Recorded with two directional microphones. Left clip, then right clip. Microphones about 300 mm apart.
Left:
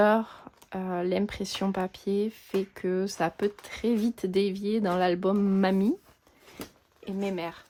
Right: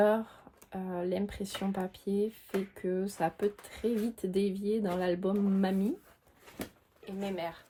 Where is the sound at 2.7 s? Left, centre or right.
Left.